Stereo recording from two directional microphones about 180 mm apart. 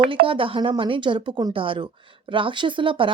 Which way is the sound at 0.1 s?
30° right (ahead or behind).